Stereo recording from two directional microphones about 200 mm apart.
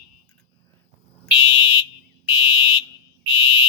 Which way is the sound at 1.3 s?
25° left (ahead or behind).